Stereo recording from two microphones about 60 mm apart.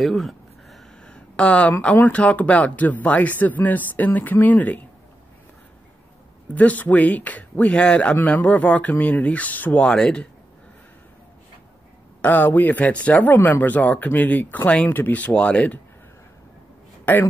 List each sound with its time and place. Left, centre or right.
0.0 s a sound: centre
1.0 s a sound: centre
1.7 s speech: left
6.5 s speech: left
9.8 s speech: centre
12.2 s speech: left
17.0 s speech: left